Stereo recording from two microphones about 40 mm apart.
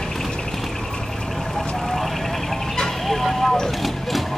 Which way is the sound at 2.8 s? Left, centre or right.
Centre.